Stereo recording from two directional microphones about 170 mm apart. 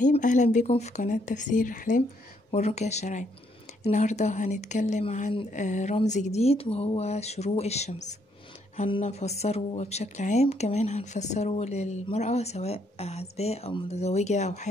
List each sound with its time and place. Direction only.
0.0 s speech: 50° left (ahead or behind)
2.5 s speech: 40° left (ahead or behind)